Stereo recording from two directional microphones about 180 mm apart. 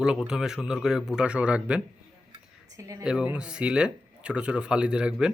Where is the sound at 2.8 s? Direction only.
15° right (ahead or behind).